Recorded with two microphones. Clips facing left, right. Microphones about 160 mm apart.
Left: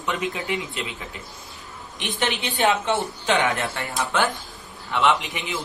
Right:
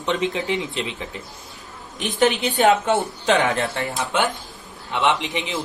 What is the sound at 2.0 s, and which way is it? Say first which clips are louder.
A woman's voice: right 7 dB; 45° right (ahead or behind).